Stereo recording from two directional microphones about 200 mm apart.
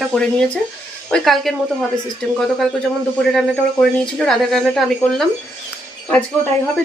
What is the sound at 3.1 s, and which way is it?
Speech, centre (ahead or behind).